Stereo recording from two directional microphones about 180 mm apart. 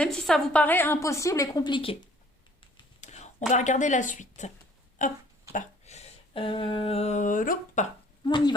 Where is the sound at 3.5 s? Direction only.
40° left (ahead or behind).